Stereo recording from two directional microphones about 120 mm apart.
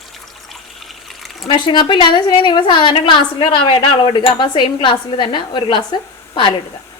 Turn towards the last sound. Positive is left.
turn(degrees=40)  # may be behind; listen again after turning